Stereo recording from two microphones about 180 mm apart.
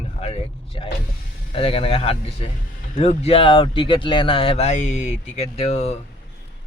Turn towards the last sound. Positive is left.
turn(degrees=35)  # may be behind; listen again after turning